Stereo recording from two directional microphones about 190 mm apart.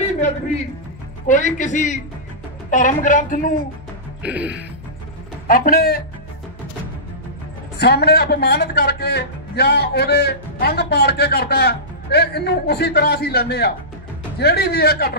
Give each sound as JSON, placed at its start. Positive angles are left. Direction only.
{"t": 1.2, "sound": "a woman's voice", "side_deg": 40}
{"t": 4.2, "sound": "music", "side_deg": -5}
{"t": 5.5, "sound": "a woman's voice", "side_deg": 50}
{"t": 7.8, "sound": "speech", "side_deg": 60}